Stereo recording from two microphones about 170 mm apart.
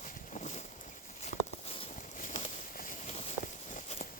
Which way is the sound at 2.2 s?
50° left (ahead or behind).